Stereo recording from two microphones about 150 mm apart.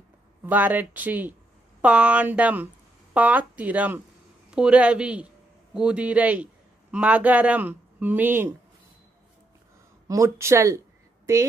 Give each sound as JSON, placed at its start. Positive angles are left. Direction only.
{"t": 0.4, "sound": "a man's voice", "side_deg": -10}
{"t": 10.0, "sound": "a woman's voice", "side_deg": -20}